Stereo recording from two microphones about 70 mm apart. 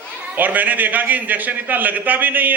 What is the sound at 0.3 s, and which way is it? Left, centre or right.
A man's voice, right.